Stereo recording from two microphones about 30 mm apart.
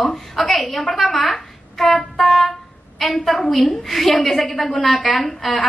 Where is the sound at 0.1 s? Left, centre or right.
Centre.